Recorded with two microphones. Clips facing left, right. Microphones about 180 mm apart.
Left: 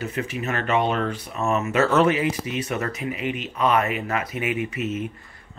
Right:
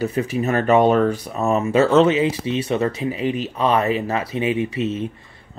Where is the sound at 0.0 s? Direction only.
35° right (ahead or behind).